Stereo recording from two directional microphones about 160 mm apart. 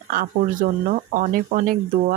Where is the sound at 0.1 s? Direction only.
60° right (ahead or behind).